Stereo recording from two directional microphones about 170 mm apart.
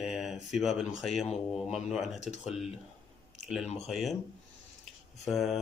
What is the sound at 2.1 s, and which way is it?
Speech, 40° left (ahead or behind).